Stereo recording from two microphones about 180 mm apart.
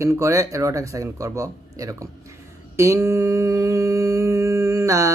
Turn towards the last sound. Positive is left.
turn(degrees=-15)  # may be behind; listen again after turning